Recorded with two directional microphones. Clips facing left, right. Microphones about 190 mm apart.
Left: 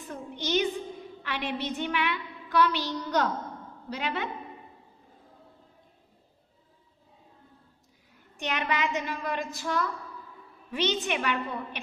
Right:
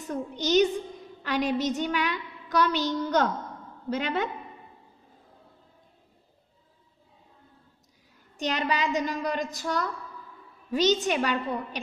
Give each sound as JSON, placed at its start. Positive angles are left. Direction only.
{"t": 0.0, "sound": "a sound", "side_deg": -40}
{"t": 1.2, "sound": "a woman's voice", "side_deg": -40}
{"t": 8.4, "sound": "a woman's voice", "side_deg": -35}